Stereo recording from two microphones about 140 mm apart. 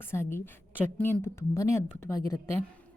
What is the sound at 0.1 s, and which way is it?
A woman's voice, 15° left (ahead or behind).